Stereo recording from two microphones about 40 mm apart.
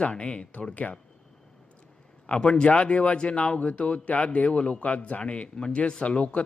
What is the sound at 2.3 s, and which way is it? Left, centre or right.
Speech, left.